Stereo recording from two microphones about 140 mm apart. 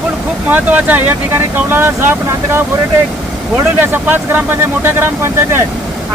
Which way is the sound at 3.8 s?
15° right (ahead or behind).